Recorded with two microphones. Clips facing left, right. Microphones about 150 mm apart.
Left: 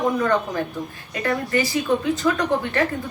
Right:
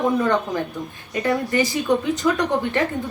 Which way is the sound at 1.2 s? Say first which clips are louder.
Right 1 dB; 20° right (ahead or behind).